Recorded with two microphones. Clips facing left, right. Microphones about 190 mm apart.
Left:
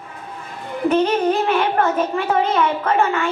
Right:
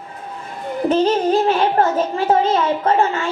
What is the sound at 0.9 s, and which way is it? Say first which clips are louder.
A woman's voice: right 2 dB; 30° right (ahead or behind).